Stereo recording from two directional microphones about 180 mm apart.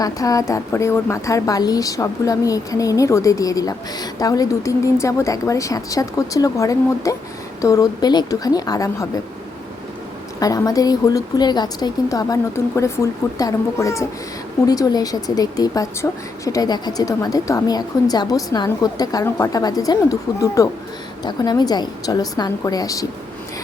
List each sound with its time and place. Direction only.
0.0 s a woman's voice: 20° left (ahead or behind)
10.4 s a woman's voice: 20° left (ahead or behind)